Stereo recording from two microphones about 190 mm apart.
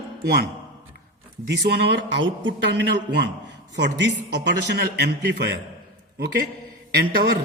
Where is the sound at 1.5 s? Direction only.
65° right (ahead or behind).